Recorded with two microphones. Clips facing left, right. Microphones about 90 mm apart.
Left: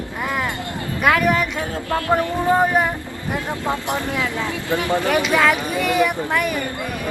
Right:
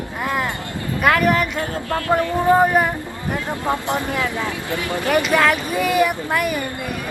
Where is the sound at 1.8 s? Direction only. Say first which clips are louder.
Left 4 dB; 30° left (ahead or behind).